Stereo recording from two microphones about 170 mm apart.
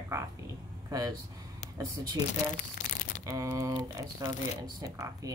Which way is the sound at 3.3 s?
20° right (ahead or behind).